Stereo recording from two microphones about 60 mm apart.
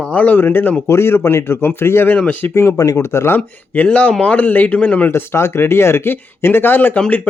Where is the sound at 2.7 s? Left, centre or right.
Left.